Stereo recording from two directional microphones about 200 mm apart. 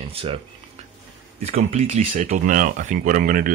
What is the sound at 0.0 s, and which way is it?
Speech, 25° right (ahead or behind).